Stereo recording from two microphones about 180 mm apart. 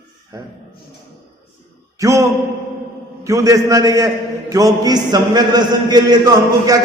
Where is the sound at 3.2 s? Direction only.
20° right (ahead or behind).